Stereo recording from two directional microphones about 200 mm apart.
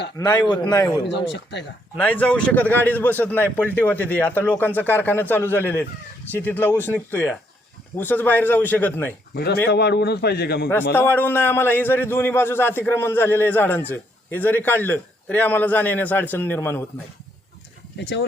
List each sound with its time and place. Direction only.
0.2 s a man's voice: 20° left (ahead or behind)
1.0 s speech: 60° left (ahead or behind)
2.0 s a man's voice: 5° left (ahead or behind)
9.3 s a man's voice: 55° left (ahead or behind)
10.9 s a man's voice: 10° left (ahead or behind)
17.9 s speech: 60° left (ahead or behind)